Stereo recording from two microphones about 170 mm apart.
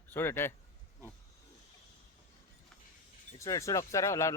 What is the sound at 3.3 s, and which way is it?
Speech, 20° left (ahead or behind).